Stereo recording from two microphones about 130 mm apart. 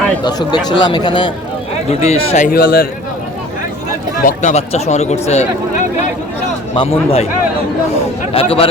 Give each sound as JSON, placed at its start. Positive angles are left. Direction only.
{"t": 0.2, "sound": "speech", "side_deg": 35}
{"t": 1.9, "sound": "speech", "side_deg": 55}
{"t": 4.3, "sound": "speech", "side_deg": 65}
{"t": 6.7, "sound": "a man's voice", "side_deg": 45}
{"t": 8.3, "sound": "a man's voice", "side_deg": 45}